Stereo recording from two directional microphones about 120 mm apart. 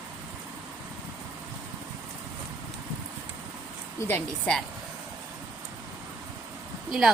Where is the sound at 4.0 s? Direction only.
15° left (ahead or behind).